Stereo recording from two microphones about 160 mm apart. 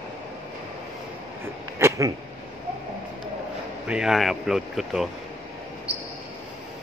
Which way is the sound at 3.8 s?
5° right (ahead or behind).